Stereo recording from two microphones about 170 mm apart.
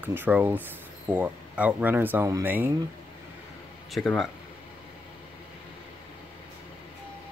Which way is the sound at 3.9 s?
Centre (ahead or behind).